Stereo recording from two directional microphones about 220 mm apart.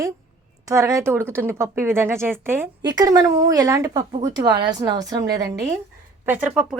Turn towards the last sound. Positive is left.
turn(degrees=-5)  # may be behind; listen again after turning